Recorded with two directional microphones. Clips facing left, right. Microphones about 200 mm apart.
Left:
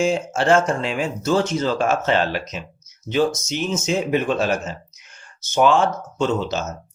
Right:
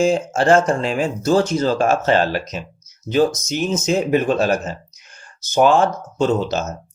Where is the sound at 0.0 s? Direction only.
35° right (ahead or behind).